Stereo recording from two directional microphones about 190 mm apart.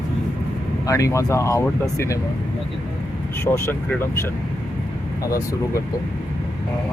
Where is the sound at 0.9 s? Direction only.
15° left (ahead or behind).